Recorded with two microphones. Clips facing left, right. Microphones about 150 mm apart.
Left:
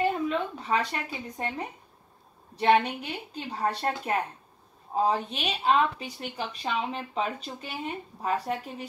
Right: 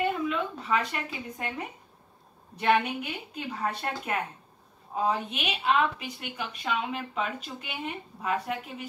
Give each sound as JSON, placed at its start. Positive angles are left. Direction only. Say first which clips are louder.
{"t": 0.0, "sound": "a woman's voice", "louder": "left 1 dB", "side_deg": 35}